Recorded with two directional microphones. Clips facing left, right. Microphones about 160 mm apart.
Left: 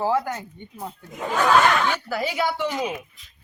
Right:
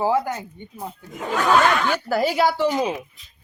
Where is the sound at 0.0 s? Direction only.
15° right (ahead or behind).